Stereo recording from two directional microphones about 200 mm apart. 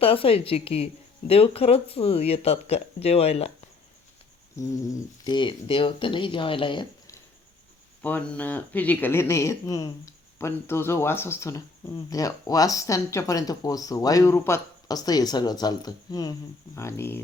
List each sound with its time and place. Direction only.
0.0 s speech: 25° left (ahead or behind)
5.2 s speech: 20° left (ahead or behind)
8.0 s speech: 10° left (ahead or behind)